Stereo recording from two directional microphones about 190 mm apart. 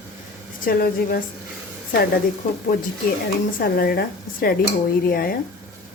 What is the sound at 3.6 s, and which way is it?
Speech, 55° left (ahead or behind).